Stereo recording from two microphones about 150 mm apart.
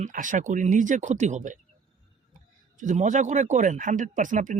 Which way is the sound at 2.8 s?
55° right (ahead or behind).